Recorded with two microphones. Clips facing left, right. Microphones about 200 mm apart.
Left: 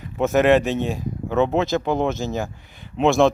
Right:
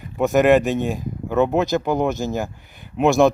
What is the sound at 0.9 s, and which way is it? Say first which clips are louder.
Speech: right 1 dB; centre (ahead or behind).